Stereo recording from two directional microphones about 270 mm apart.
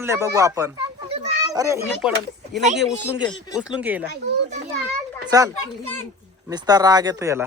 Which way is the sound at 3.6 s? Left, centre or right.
Centre.